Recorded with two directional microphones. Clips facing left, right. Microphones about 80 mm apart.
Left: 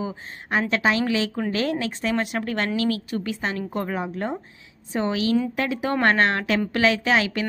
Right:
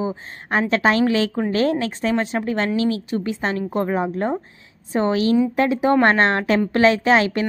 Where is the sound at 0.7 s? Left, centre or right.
Right.